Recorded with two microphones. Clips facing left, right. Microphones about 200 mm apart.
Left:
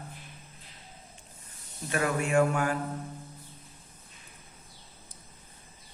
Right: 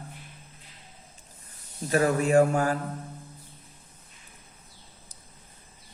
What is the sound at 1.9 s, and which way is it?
Speech, 35° right (ahead or behind).